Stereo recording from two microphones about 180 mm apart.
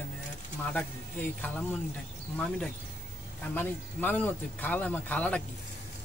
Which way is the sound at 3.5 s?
10° left (ahead or behind).